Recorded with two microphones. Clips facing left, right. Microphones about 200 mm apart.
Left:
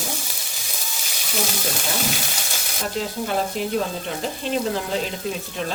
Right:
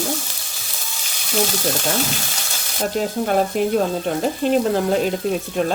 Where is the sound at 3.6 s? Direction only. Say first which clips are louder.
Right 6 dB; 50° right (ahead or behind).